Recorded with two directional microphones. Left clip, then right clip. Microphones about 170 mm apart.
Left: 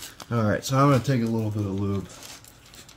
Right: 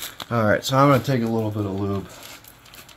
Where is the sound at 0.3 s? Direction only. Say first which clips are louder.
Right 6 dB; 45° left (ahead or behind).